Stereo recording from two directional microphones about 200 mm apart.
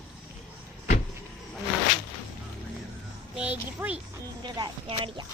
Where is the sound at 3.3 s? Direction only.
5° right (ahead or behind).